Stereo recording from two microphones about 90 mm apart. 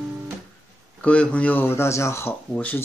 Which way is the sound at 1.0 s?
15° left (ahead or behind).